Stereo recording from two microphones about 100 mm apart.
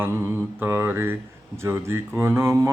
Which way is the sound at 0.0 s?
20° right (ahead or behind).